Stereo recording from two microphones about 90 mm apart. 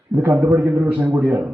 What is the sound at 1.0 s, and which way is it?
Speech, 15° right (ahead or behind).